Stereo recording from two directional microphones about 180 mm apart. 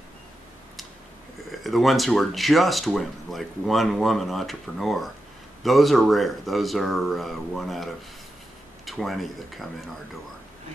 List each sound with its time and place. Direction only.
1.5 s speech: centre (ahead or behind)